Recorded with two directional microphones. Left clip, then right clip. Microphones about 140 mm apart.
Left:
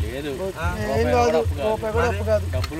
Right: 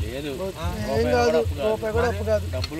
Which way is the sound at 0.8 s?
35° right (ahead or behind).